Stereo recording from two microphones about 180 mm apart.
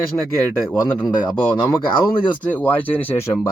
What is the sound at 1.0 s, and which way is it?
Speech, 25° left (ahead or behind).